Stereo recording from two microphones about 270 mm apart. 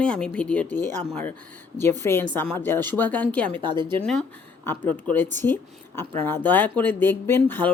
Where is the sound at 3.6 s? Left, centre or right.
Centre.